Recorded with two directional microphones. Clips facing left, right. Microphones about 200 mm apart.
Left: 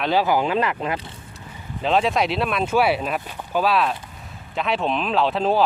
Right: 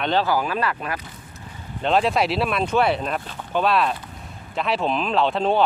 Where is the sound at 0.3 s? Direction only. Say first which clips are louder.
Left 2 dB; 20° left (ahead or behind).